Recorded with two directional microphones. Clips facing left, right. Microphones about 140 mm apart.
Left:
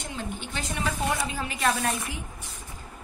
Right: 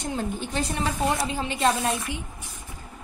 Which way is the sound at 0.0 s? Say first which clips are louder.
Right 6 dB; 40° right (ahead or behind).